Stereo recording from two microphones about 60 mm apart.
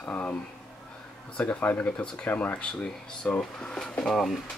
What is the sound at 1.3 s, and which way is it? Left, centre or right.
Speech, left.